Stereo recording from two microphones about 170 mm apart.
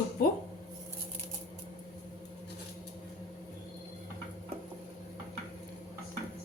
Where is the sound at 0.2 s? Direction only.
60° left (ahead or behind).